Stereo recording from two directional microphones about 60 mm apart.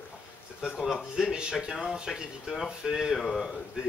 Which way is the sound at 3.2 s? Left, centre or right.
Centre.